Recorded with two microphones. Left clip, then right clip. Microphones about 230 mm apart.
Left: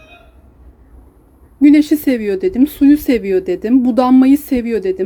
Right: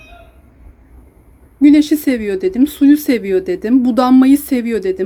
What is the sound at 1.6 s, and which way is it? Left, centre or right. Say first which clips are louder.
Speech: even; centre.